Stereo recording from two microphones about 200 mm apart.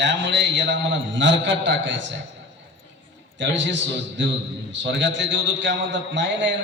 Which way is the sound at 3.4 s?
65° right (ahead or behind).